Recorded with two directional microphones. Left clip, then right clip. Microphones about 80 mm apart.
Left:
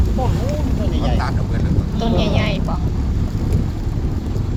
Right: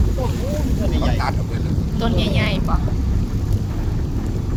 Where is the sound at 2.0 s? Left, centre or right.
Centre.